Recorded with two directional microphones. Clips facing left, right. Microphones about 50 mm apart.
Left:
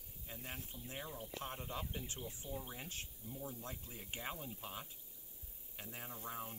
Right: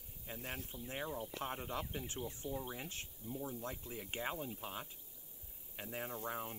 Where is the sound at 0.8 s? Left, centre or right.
Right.